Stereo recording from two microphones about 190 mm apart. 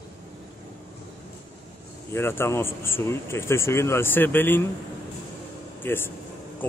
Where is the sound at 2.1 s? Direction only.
10° left (ahead or behind).